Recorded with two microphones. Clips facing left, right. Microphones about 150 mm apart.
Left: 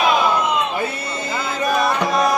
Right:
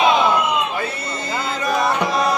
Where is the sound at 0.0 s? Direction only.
25° right (ahead or behind).